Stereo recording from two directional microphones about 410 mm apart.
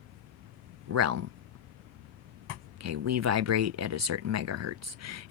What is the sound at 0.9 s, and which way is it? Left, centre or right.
Speech, right.